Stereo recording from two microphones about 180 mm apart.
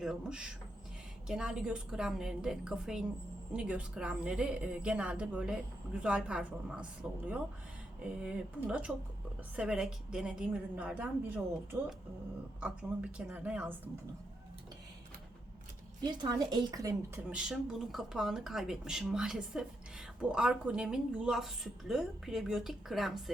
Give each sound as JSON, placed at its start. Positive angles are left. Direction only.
{"t": 0.0, "sound": "speech", "side_deg": -5}
{"t": 12.5, "sound": "speech", "side_deg": -5}
{"t": 16.0, "sound": "a woman's voice", "side_deg": -25}
{"t": 17.2, "sound": "speech", "side_deg": -5}